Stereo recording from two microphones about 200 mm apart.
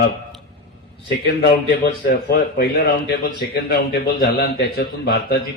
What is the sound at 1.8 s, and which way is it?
A man's voice, 50° left (ahead or behind).